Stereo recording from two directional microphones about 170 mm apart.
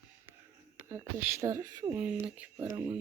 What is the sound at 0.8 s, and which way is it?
Speech, 15° right (ahead or behind).